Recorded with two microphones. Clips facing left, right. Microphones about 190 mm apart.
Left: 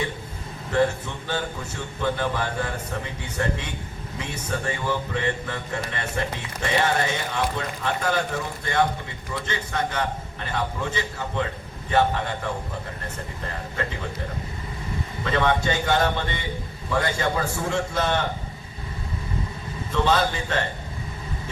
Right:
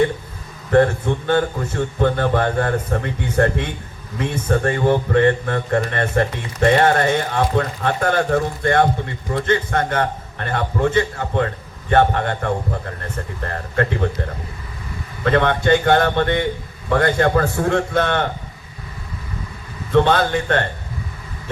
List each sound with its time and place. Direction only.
0.7 s speech: 55° right (ahead or behind)
15.2 s speech: 55° right (ahead or behind)
19.9 s speech: 55° right (ahead or behind)